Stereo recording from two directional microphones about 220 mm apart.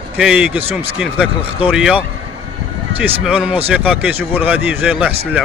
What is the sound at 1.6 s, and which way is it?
Speech, 5° right (ahead or behind).